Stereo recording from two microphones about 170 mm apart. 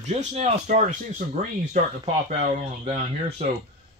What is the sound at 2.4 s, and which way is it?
Speech, 40° right (ahead or behind).